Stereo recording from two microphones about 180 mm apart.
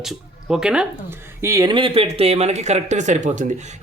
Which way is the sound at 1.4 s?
20° right (ahead or behind).